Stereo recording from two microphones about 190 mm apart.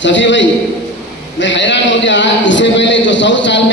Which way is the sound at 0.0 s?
75° left (ahead or behind).